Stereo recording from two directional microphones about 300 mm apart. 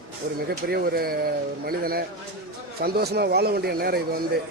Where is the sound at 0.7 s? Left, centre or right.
Right.